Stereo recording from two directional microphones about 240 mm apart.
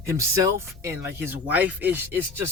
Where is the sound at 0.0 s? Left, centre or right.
Centre.